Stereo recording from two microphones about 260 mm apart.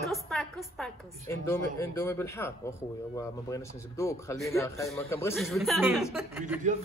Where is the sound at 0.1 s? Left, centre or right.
Centre.